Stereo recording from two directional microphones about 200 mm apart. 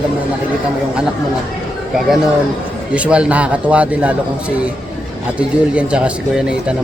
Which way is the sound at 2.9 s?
5° right (ahead or behind).